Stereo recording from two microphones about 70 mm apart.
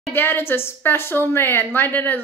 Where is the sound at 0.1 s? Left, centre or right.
Left.